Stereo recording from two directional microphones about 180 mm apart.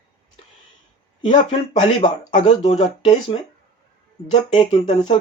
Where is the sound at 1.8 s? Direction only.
40° left (ahead or behind).